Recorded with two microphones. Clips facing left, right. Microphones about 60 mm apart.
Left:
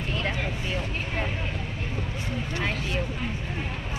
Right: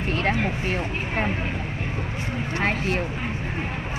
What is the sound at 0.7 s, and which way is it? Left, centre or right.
Speech, right.